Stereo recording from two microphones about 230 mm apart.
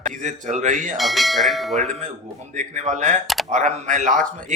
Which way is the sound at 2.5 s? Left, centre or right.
Right.